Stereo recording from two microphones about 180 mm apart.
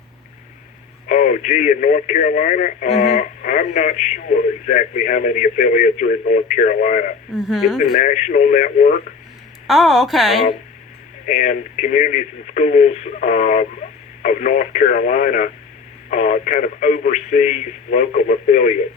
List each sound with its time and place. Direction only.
1.0 s speech: 45° left (ahead or behind)
7.3 s speech: centre (ahead or behind)
7.9 s speech: 45° left (ahead or behind)
9.6 s speech: centre (ahead or behind)
11.3 s speech: 40° left (ahead or behind)